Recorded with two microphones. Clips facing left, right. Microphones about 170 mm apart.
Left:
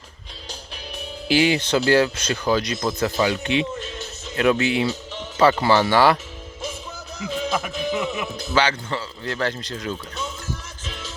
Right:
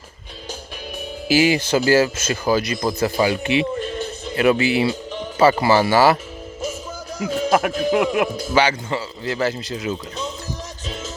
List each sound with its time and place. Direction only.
1.3 s speech: 5° right (ahead or behind)
3.8 s music: 50° right (ahead or behind)
4.4 s speech: 5° right (ahead or behind)
7.2 s a man's voice: 45° right (ahead or behind)
8.5 s speech: 10° right (ahead or behind)